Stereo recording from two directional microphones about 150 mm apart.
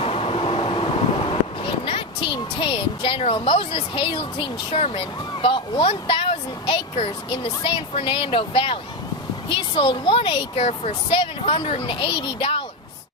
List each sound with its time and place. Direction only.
0.0 s train: 40° left (ahead or behind)
1.8 s speech: 35° left (ahead or behind)